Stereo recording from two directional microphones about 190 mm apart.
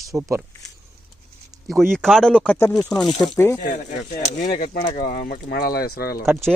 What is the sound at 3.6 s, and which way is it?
Speech, 45° left (ahead or behind).